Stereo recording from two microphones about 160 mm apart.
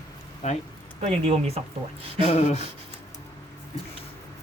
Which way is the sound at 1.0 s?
40° right (ahead or behind).